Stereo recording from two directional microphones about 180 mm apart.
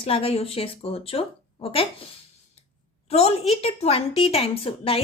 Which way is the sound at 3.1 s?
35° left (ahead or behind).